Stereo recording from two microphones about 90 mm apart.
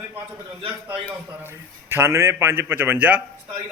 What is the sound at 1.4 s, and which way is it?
A man's voice, 30° right (ahead or behind).